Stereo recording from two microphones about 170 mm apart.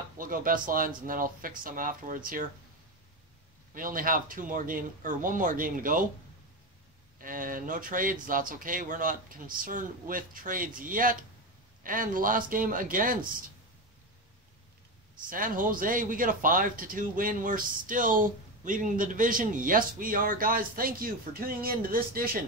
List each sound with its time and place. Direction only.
0.2 s speech: 55° right (ahead or behind)
3.7 s speech: 55° right (ahead or behind)
7.2 s speech: 55° right (ahead or behind)
15.2 s speech: 55° right (ahead or behind)